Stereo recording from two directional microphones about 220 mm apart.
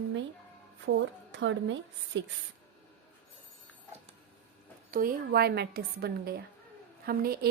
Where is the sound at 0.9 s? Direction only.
55° right (ahead or behind).